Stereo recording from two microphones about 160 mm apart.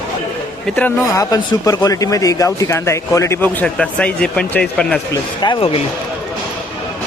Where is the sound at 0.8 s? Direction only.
10° left (ahead or behind).